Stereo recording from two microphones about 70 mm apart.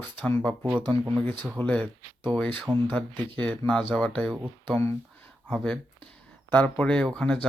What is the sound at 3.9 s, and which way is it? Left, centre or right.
Speech, centre.